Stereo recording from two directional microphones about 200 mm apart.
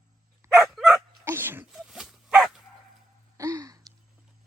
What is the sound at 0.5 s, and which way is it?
Dog, centre (ahead or behind).